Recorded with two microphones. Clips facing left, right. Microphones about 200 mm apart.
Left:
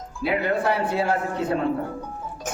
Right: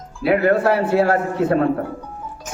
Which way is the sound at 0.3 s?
65° right (ahead or behind).